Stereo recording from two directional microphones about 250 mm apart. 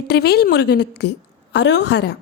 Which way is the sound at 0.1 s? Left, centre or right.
Left.